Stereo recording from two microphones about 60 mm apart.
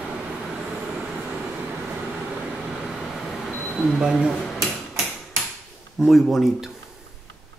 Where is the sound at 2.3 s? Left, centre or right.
Centre.